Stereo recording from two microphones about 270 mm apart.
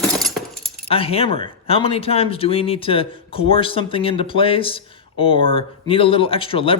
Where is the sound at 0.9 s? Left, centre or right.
Left.